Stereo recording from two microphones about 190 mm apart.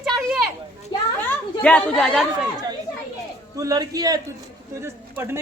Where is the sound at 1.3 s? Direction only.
5° left (ahead or behind).